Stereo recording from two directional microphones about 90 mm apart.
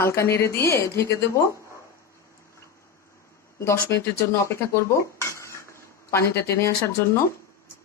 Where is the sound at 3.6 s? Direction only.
30° left (ahead or behind).